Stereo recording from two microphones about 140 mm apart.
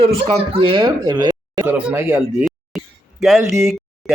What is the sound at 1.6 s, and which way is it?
Speech, 15° right (ahead or behind).